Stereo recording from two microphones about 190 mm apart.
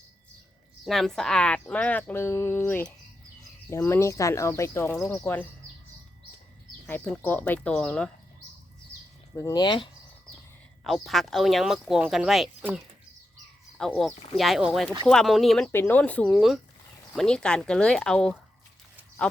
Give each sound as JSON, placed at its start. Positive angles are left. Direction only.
{"t": 0.9, "sound": "speech", "side_deg": 0}
{"t": 6.8, "sound": "speech", "side_deg": 10}
{"t": 9.3, "sound": "speech", "side_deg": 20}
{"t": 10.8, "sound": "speech", "side_deg": 0}